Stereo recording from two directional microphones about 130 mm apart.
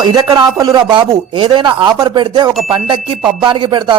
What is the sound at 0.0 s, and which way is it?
A man's voice, 30° right (ahead or behind).